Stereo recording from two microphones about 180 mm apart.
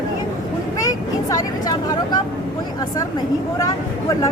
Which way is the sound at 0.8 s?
20° left (ahead or behind).